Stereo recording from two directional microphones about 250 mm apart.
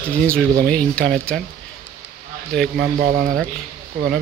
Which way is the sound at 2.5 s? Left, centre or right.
Centre.